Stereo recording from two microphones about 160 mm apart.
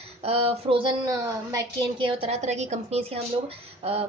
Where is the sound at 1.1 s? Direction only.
20° right (ahead or behind).